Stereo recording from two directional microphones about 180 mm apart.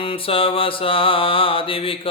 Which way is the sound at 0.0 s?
30° left (ahead or behind).